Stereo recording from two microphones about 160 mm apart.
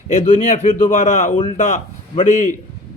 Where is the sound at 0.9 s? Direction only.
55° left (ahead or behind).